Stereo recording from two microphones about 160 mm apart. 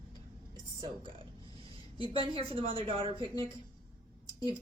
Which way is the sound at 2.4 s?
35° right (ahead or behind).